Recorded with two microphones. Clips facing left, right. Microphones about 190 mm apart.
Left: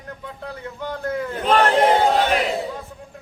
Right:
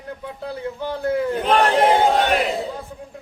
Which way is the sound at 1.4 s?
Centre (ahead or behind).